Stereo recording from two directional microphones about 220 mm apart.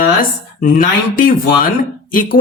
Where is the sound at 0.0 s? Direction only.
40° left (ahead or behind).